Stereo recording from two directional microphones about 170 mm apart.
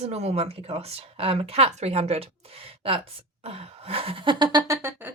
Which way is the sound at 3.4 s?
35° right (ahead or behind).